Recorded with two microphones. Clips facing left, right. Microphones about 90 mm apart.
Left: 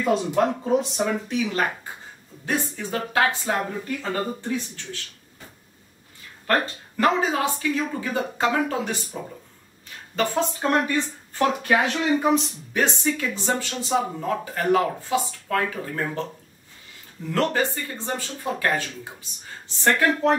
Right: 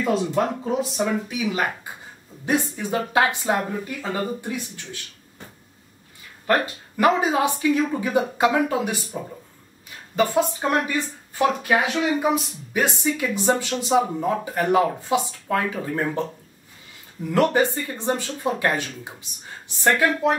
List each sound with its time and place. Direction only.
0.4 s speech: centre (ahead or behind)
6.4 s speech: 15° right (ahead or behind)